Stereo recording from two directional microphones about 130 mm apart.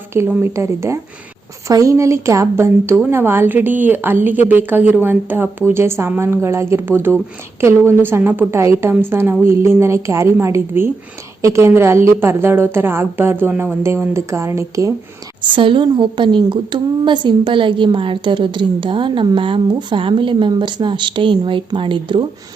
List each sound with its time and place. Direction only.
0.1 s a woman's voice: 20° right (ahead or behind)
15.5 s a woman's voice: 40° right (ahead or behind)